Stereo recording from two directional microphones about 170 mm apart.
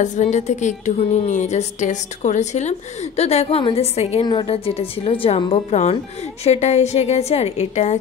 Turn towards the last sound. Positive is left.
turn(degrees=40)  # may be behind; listen again after turning